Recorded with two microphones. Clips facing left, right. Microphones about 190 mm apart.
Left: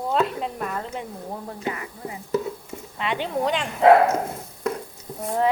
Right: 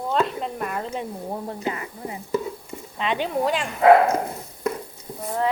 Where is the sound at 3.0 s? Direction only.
20° right (ahead or behind).